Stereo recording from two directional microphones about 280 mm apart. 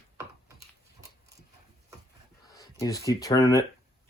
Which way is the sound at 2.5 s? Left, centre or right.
Centre.